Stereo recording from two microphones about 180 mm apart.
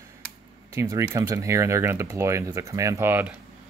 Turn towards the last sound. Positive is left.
turn(degrees=-10)  # may be behind; listen again after turning